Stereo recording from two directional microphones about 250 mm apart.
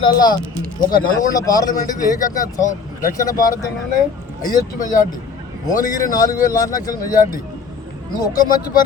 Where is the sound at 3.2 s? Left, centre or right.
Centre.